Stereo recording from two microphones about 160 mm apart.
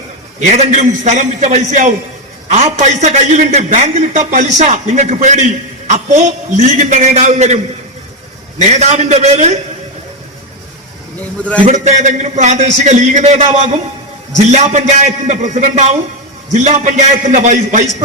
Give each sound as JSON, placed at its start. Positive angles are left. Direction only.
{"t": 0.3, "sound": "a man's voice", "side_deg": -45}
{"t": 11.6, "sound": "a man's voice", "side_deg": -50}